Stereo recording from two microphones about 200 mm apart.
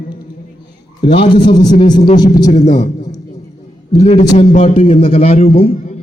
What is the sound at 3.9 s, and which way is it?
A man's voice, 35° left (ahead or behind).